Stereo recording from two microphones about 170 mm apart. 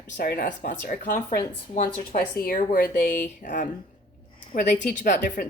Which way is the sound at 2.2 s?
60° left (ahead or behind).